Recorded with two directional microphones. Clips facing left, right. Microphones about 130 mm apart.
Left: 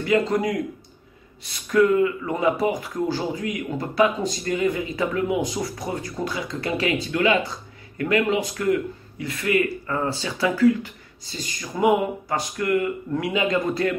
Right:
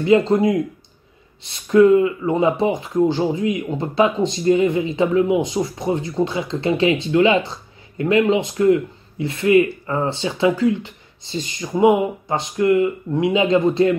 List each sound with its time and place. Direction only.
0.0 s speech: 25° right (ahead or behind)